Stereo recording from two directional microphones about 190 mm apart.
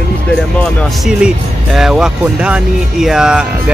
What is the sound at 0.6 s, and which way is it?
Speech, centre (ahead or behind).